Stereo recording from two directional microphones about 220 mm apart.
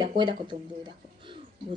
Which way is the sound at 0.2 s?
20° right (ahead or behind).